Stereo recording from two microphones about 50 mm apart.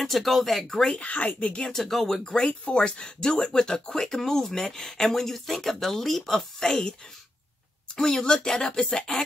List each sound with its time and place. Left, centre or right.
0.0 s speech: centre
0.9 s speech: left
1.6 s speech: centre
7.9 s speech: centre